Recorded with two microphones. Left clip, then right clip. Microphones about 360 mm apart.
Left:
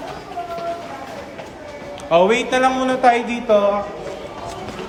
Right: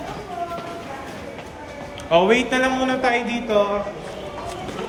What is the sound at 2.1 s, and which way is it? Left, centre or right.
A man's voice, centre.